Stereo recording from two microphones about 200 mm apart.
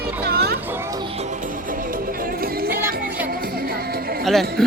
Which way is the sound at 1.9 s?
45° right (ahead or behind).